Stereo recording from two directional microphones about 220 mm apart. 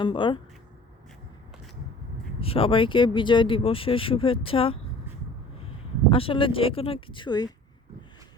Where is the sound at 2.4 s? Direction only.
25° left (ahead or behind).